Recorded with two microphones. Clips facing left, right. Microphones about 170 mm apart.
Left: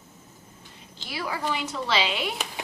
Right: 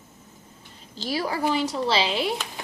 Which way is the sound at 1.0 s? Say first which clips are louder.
Right 6 dB; 35° right (ahead or behind).